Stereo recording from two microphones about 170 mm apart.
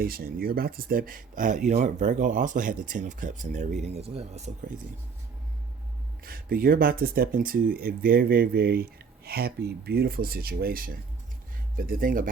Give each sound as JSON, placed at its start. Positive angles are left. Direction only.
{"t": 0.0, "sound": "speech", "side_deg": -60}
{"t": 6.2, "sound": "speech", "side_deg": -60}